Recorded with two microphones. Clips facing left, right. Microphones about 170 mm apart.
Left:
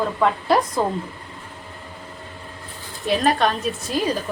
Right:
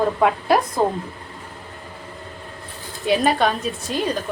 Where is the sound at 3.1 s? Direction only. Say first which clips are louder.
Right 1 dB; centre (ahead or behind).